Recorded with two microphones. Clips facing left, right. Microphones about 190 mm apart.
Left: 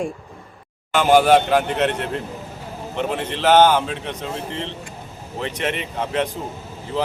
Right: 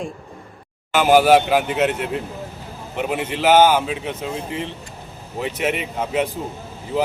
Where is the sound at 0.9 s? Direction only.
5° right (ahead or behind).